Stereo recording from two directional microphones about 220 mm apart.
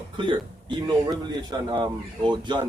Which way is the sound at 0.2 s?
20° right (ahead or behind).